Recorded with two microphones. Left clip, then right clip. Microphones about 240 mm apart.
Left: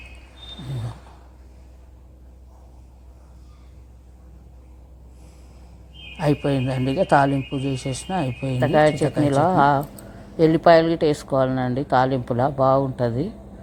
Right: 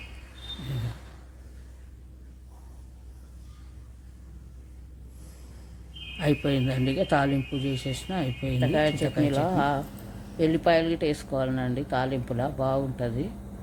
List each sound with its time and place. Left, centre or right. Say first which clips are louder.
6.1 s speech: left 4 dB; centre